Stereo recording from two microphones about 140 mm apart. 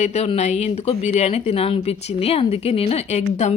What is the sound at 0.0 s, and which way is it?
Speech, 50° left (ahead or behind).